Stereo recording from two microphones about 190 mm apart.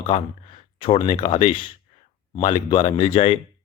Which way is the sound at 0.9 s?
30° left (ahead or behind).